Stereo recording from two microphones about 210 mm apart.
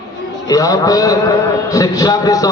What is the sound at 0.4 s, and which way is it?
A man's voice, 15° left (ahead or behind).